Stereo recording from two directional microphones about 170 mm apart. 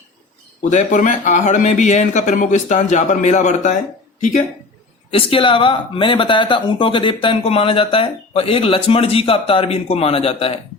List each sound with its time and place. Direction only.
0.7 s speech: 45° left (ahead or behind)
5.1 s speech: 30° left (ahead or behind)